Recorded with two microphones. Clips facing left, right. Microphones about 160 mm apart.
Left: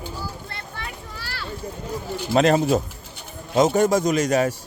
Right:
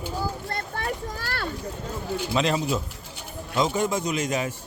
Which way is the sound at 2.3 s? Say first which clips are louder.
Left 8 dB; 45° left (ahead or behind).